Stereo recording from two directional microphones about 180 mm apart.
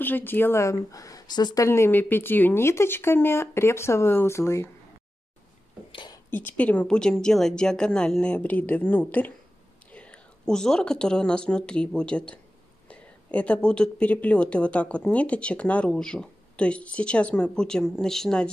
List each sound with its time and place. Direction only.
0.0 s a woman's voice: 10° left (ahead or behind)
5.9 s a sound: 25° left (ahead or behind)
6.3 s a woman's voice: 10° left (ahead or behind)